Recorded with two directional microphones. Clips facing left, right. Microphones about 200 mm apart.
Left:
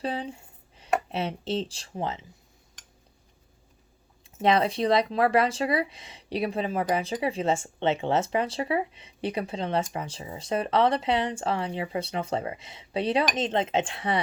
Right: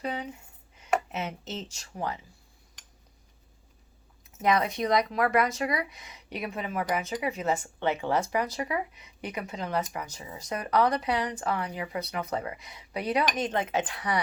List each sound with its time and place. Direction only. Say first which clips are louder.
0.0 s speech: left 3 dB; 30° left (ahead or behind)
4.4 s speech: left 3 dB; 30° left (ahead or behind)